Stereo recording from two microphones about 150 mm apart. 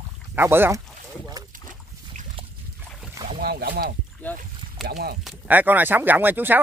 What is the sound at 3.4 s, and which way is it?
Speech, 90° right.